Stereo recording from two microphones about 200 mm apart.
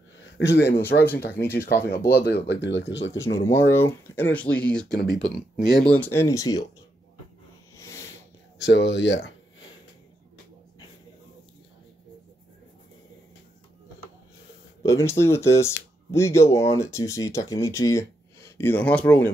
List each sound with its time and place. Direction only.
0.4 s speech: 60° left (ahead or behind)
1.6 s speech: 15° left (ahead or behind)
1.9 s speech: 55° left (ahead or behind)
3.2 s speech: 15° left (ahead or behind)
5.2 s speech: 60° left (ahead or behind)
5.9 s speech: 10° left (ahead or behind)
7.8 s a sound: 15° left (ahead or behind)
8.5 s speech: 60° left (ahead or behind)
14.8 s speech: 15° left (ahead or behind)